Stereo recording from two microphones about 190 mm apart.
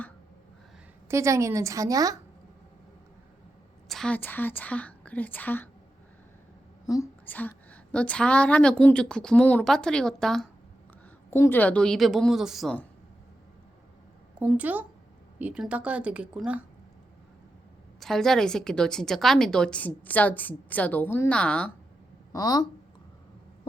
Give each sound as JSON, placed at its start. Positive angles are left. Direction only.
{"t": 1.0, "sound": "speech", "side_deg": -15}
{"t": 3.8, "sound": "speech", "side_deg": 5}
{"t": 6.8, "sound": "a woman's voice", "side_deg": 15}
{"t": 11.3, "sound": "a woman's voice", "side_deg": 10}
{"t": 14.3, "sound": "speech", "side_deg": -10}
{"t": 18.0, "sound": "a woman's voice", "side_deg": 0}
{"t": 22.3, "sound": "speech", "side_deg": 20}